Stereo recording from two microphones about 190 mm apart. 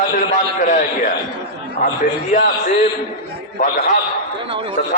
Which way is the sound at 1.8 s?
45° left (ahead or behind).